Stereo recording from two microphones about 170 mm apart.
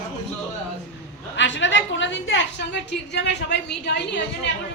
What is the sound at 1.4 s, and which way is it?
A woman's voice, 90° left.